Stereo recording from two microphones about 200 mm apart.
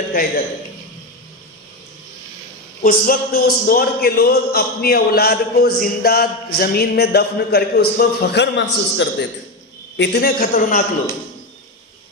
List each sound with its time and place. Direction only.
0.1 s a man's voice: 50° left (ahead or behind)
2.8 s a man's voice: 50° left (ahead or behind)